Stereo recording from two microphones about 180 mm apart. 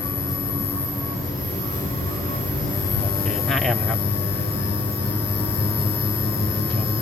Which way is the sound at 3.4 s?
Centre (ahead or behind).